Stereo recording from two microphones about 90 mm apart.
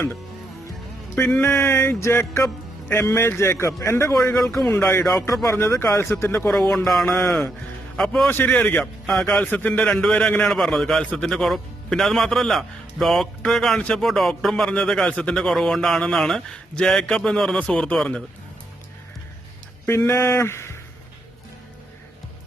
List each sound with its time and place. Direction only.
1.1 s a man's voice: 20° left (ahead or behind)
6.7 s a man's voice: 5° left (ahead or behind)
8.3 s a man's voice: 20° left (ahead or behind); by 18.2 s 5° left (ahead or behind)
19.9 s a man's voice: 30° left (ahead or behind)